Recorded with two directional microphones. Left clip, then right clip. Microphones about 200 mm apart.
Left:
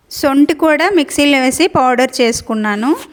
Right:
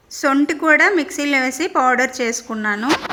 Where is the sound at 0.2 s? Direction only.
65° left (ahead or behind).